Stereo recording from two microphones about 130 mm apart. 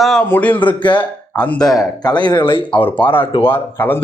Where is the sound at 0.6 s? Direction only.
35° left (ahead or behind).